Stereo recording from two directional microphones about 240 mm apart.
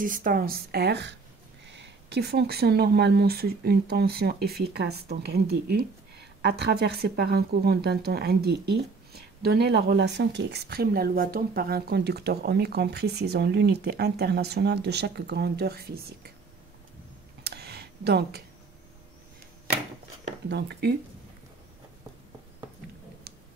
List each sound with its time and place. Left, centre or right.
0.0 s speech: right
17.4 s a sound: right
20.4 s speech: right